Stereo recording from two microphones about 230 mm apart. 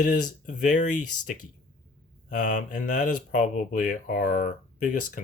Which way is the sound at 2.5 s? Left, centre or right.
Left.